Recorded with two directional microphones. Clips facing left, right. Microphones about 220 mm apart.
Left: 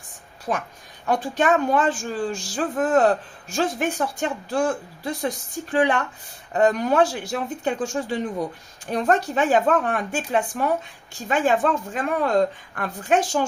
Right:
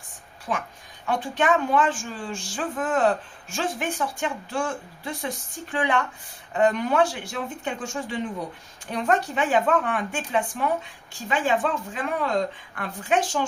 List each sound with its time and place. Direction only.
0.5 s a woman's voice: 35° left (ahead or behind)